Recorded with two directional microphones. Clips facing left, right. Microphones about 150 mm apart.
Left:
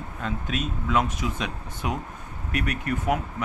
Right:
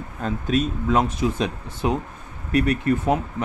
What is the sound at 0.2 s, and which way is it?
Speech, 40° right (ahead or behind).